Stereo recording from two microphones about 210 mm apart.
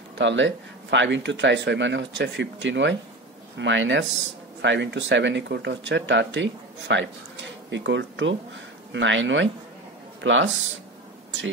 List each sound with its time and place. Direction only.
0.2 s speech: 60° right (ahead or behind)